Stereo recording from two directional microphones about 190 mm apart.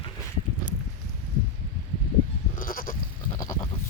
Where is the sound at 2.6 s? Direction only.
50° left (ahead or behind).